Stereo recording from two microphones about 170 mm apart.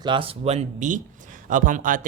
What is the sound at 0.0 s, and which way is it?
Speech, 30° right (ahead or behind).